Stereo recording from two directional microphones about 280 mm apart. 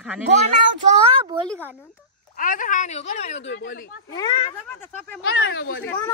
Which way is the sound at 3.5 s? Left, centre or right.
Left.